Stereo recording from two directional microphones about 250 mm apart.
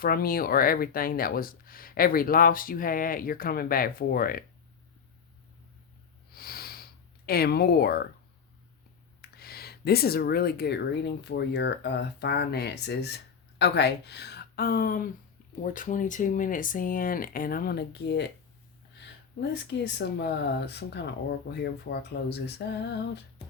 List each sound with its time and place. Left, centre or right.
0.0 s speech: left
6.3 s a sound: left
7.3 s speech: left
9.3 s speech: left
19.4 s speech: left